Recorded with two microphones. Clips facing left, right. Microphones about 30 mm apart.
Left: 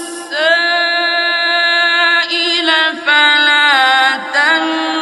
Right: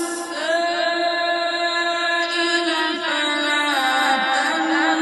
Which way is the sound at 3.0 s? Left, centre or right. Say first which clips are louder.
Left 11 dB; left.